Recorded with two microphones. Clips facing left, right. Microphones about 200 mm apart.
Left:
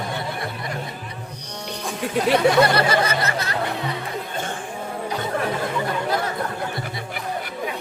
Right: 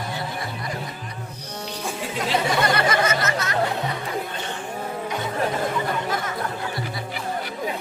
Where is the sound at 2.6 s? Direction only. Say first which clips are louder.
Left 2 dB; 35° left (ahead or behind).